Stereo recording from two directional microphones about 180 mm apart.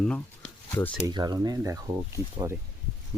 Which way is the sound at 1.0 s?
25° right (ahead or behind).